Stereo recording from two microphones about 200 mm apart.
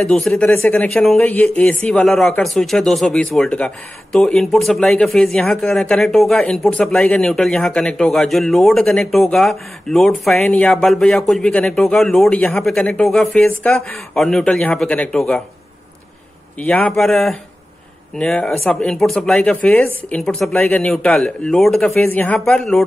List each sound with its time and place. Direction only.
0.0 s speech: 5° left (ahead or behind)
16.5 s speech: 5° left (ahead or behind)